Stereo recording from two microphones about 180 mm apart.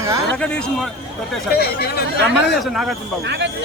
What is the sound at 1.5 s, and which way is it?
Speech, 60° left (ahead or behind).